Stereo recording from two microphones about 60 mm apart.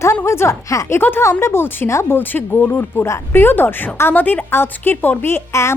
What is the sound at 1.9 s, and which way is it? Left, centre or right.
Speech, left.